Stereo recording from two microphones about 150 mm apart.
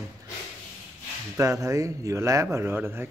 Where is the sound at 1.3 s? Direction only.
20° right (ahead or behind).